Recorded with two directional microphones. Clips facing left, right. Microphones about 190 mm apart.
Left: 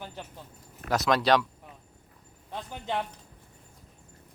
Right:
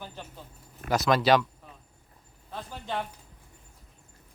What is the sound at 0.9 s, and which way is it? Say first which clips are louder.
Speech: right 1 dB; centre (ahead or behind).